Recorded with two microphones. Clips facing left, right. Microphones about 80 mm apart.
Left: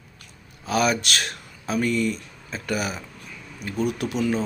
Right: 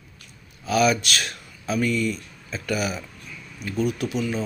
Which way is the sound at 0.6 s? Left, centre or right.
Left.